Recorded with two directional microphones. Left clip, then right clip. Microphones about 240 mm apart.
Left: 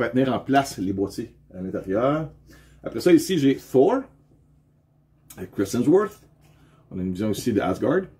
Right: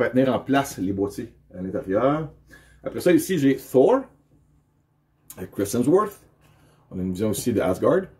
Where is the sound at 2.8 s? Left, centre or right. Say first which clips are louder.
Left 1 dB; centre.